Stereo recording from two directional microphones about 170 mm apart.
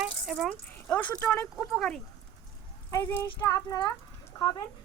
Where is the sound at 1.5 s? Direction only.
Centre (ahead or behind).